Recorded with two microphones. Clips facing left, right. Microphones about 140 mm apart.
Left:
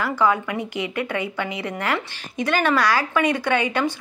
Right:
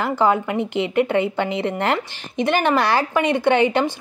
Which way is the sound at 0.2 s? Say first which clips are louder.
Right 3 dB; 30° right (ahead or behind).